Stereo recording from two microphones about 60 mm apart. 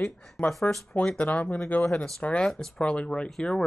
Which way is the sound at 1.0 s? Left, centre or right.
Left.